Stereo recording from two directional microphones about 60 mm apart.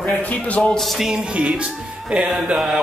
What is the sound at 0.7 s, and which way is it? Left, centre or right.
Music, centre.